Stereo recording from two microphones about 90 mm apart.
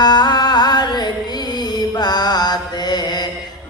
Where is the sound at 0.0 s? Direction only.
50° left (ahead or behind).